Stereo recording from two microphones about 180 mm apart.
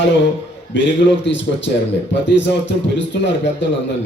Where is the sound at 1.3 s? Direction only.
85° left.